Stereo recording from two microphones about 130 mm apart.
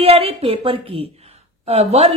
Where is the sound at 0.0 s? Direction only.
50° right (ahead or behind).